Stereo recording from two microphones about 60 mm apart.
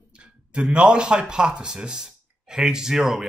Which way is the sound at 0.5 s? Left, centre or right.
Centre.